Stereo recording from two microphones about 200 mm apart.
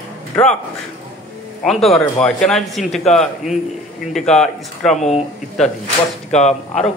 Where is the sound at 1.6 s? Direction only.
Centre (ahead or behind).